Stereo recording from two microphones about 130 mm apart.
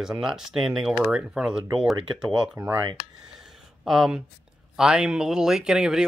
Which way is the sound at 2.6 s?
25° right (ahead or behind).